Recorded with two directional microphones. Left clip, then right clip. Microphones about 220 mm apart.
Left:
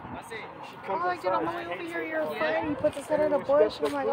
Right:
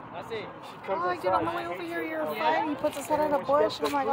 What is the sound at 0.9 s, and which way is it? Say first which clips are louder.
Speech: right 1 dB; 40° right (ahead or behind).